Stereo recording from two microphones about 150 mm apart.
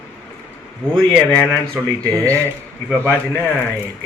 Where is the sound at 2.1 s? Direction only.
20° right (ahead or behind).